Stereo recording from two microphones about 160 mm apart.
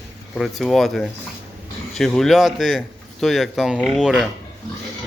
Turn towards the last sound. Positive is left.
turn(degrees=0)  # may be behind; listen again after turning